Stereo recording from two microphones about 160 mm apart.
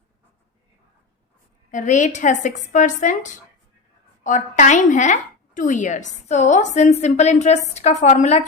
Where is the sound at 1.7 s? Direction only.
50° left (ahead or behind).